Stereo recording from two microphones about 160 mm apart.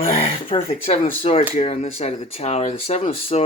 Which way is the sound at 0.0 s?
35° left (ahead or behind).